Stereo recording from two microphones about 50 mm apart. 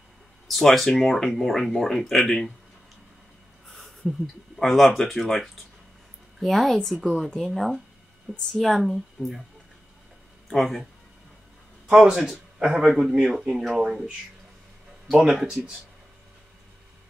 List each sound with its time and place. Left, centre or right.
0.5 s speech: centre
3.6 s a sound: centre
4.6 s speech: centre
10.5 s speech: centre
11.9 s speech: centre
15.0 s speech: centre
15.4 s speech: right